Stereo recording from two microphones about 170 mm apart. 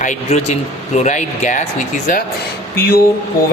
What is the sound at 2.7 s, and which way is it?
Speech, 65° left (ahead or behind).